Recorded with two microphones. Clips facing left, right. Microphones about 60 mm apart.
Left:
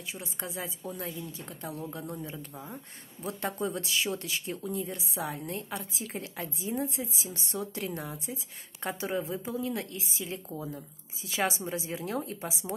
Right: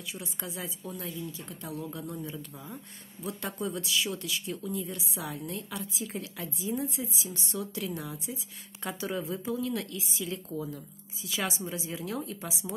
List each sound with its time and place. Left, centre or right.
0.1 s a woman's voice: left